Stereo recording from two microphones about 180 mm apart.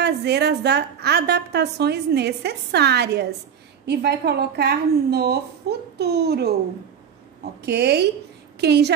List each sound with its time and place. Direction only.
0.0 s a woman's voice: 65° right (ahead or behind)
7.6 s a woman's voice: 65° right (ahead or behind)